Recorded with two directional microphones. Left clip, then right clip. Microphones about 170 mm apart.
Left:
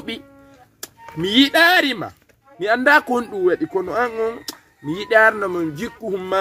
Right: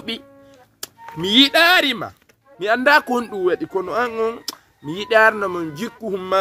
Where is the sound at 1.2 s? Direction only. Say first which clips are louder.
Right 1 dB; 15° right (ahead or behind).